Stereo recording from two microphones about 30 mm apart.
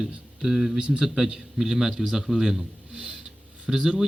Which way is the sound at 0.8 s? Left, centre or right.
Right.